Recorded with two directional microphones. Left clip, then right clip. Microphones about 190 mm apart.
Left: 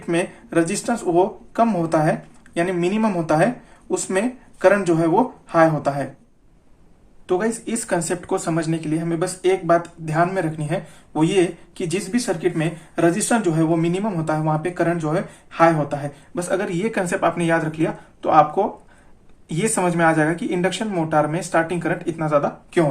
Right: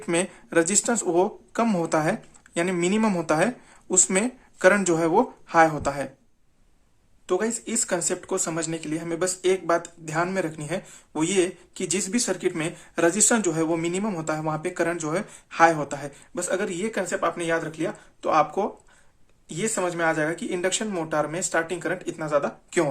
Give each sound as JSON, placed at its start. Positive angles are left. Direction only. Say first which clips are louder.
{"t": 0.0, "sound": "speech", "louder": "left 3 dB", "side_deg": -35}
{"t": 7.3, "sound": "speech", "louder": "left 4 dB", "side_deg": -25}
{"t": 19.5, "sound": "speech", "louder": "left 5 dB", "side_deg": -10}